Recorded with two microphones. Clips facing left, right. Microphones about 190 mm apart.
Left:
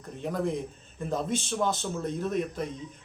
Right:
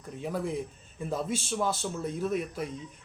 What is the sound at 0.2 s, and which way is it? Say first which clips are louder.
A man's voice: left 2 dB; 5° right (ahead or behind).